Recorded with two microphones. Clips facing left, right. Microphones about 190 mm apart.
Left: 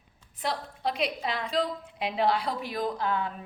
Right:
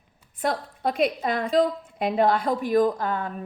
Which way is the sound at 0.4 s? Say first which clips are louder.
Right 5 dB; 50° right (ahead or behind).